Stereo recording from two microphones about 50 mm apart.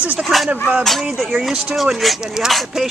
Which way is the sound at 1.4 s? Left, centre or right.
Centre.